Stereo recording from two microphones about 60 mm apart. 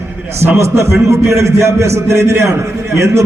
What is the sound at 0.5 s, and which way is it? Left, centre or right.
A man's voice, right.